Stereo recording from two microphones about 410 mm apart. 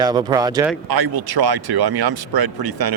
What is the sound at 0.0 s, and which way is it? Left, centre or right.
Speech, centre.